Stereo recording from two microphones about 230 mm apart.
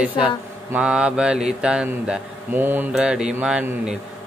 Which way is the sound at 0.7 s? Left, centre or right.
Centre.